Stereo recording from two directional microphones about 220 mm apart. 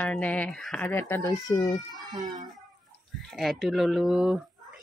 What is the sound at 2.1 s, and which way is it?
Speech, 20° right (ahead or behind).